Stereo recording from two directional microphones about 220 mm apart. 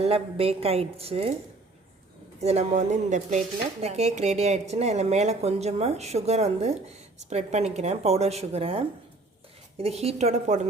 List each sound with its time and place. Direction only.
0.0 s speech: 25° right (ahead or behind)
2.4 s speech: 30° right (ahead or behind)